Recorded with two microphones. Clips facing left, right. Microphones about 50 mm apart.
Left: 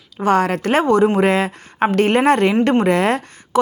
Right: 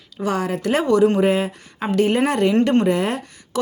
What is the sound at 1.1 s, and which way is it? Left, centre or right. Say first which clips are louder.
Speech: left 2 dB; left.